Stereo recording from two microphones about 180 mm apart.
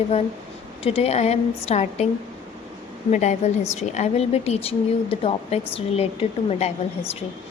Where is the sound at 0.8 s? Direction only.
30° left (ahead or behind).